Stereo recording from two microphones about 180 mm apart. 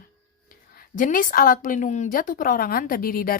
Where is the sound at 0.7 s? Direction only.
50° left (ahead or behind).